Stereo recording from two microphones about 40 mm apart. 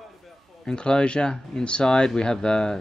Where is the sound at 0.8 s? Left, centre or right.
Left.